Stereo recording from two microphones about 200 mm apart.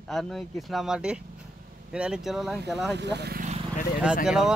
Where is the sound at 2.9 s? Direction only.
60° right (ahead or behind).